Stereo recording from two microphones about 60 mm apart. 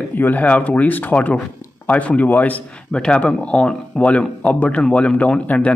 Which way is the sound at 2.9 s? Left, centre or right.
Centre.